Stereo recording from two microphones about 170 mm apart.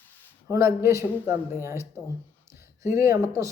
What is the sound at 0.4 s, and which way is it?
Speech, 20° right (ahead or behind).